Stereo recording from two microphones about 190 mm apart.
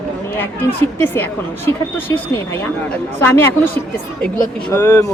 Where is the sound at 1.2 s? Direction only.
10° left (ahead or behind).